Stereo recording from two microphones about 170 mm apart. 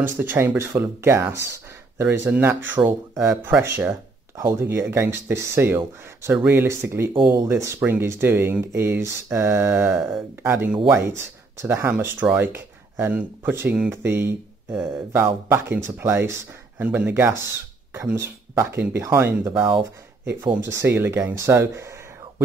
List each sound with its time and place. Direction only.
0.0 s speech: 10° right (ahead or behind)